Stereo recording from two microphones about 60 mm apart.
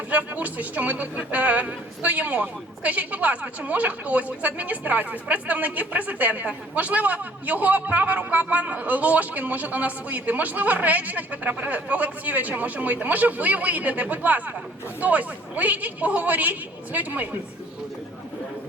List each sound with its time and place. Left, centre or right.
0.1 s speech: right